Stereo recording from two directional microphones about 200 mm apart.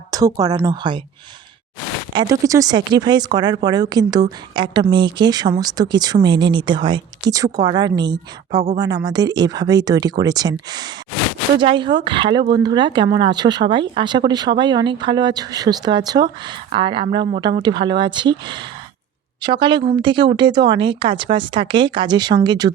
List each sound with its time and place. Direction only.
0.1 s a woman's voice: 20° right (ahead or behind)
2.1 s a woman's voice: 25° right (ahead or behind)